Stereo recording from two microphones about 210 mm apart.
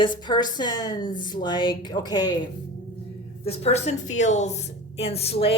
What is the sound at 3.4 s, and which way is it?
A woman's voice, 30° left (ahead or behind).